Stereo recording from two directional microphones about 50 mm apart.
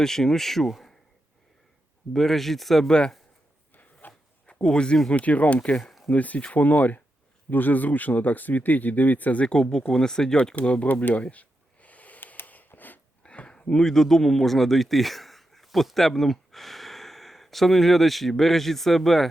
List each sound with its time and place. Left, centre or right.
0.0 s speech: centre
2.1 s speech: centre
4.0 s a sound: left
4.6 s speech: centre
5.1 s speech: left; by 10.3 s centre
10.5 s speech: left
11.2 s a sound: left
13.2 s a man's voice: left; by 19.3 s centre